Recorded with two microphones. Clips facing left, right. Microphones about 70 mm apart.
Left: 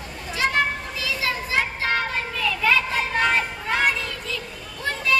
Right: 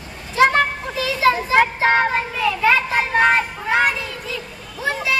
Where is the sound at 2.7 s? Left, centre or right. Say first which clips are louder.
Right 2 dB; right.